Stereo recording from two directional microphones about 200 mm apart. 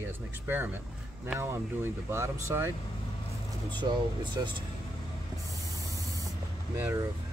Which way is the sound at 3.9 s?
20° right (ahead or behind).